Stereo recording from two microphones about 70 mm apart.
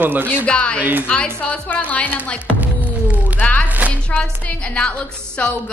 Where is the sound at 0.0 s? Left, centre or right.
Right.